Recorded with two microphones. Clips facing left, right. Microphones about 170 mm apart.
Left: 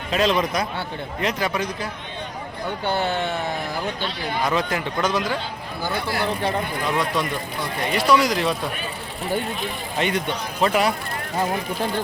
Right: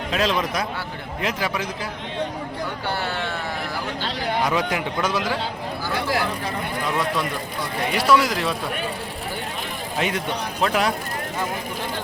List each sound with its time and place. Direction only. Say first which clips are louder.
0.1 s a man's voice: left 3 dB; centre (ahead or behind)
2.8 s speech: left 6 dB; 20° left (ahead or behind)
4.4 s a man's voice: even; 10° right (ahead or behind)
7.9 s a man's voice: even; 5° right (ahead or behind)
10.0 s a man's voice: left 1 dB; 5° right (ahead or behind)